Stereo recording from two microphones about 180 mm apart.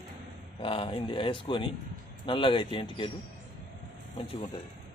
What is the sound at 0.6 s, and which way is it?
Speech, 30° left (ahead or behind).